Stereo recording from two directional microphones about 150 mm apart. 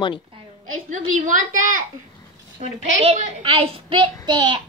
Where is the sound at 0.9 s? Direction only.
60° right (ahead or behind).